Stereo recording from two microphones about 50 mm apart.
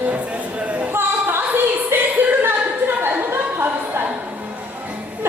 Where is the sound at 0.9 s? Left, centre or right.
Right.